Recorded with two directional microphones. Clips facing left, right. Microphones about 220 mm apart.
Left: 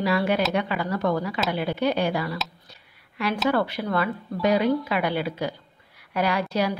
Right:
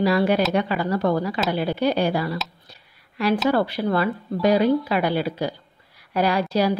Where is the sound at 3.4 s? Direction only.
35° right (ahead or behind).